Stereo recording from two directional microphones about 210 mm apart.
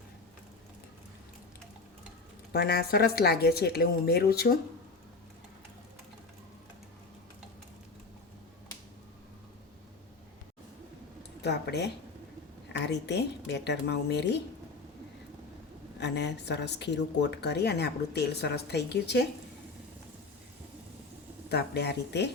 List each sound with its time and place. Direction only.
2.5 s a woman's voice: 50° left (ahead or behind)
11.4 s a woman's voice: 55° left (ahead or behind)
16.0 s a woman's voice: 55° left (ahead or behind)
21.5 s a woman's voice: 50° left (ahead or behind)